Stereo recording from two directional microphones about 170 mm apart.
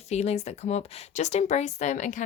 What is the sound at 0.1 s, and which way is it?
Speech, 40° left (ahead or behind).